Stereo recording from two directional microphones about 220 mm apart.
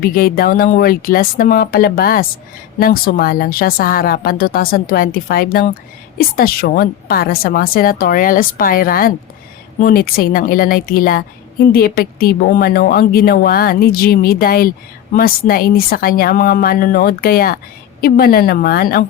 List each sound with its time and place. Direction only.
0.0 s a woman's voice: 45° left (ahead or behind)